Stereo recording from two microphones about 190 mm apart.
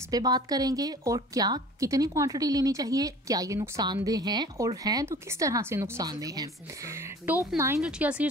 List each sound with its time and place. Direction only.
0.1 s a woman's voice: 20° right (ahead or behind)